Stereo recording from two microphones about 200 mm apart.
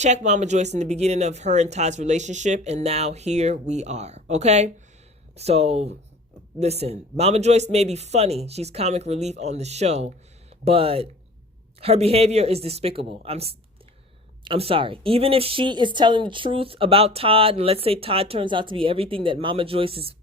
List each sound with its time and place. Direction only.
0.0 s speech: 35° right (ahead or behind)